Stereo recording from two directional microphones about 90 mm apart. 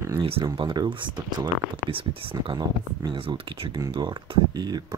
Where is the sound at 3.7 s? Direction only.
55° right (ahead or behind).